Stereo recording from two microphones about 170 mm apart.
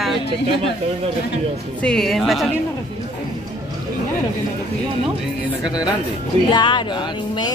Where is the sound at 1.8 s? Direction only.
5° left (ahead or behind).